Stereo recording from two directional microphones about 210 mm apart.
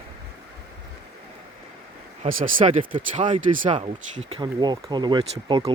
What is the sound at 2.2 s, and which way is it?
Speech, 40° right (ahead or behind).